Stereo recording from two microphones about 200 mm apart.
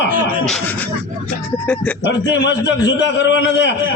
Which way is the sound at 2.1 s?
60° left (ahead or behind).